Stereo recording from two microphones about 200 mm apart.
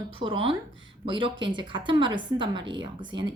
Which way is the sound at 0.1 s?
25° right (ahead or behind).